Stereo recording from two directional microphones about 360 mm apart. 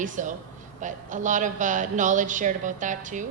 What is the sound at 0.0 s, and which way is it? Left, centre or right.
A woman's voice, right.